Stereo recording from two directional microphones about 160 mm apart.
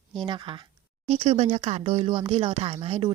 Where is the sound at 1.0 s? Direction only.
45° right (ahead or behind).